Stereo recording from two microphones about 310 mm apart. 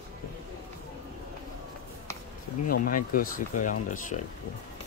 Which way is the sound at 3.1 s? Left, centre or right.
Left.